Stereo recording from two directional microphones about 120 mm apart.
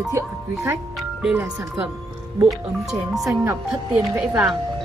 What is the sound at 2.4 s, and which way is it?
Speech, centre (ahead or behind).